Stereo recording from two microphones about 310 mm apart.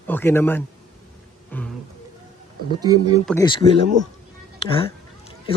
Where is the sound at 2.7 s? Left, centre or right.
Centre.